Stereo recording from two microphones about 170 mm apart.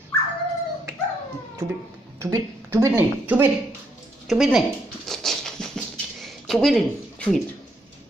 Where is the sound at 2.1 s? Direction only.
15° right (ahead or behind).